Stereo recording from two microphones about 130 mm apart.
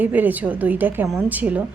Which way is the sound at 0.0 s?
15° right (ahead or behind).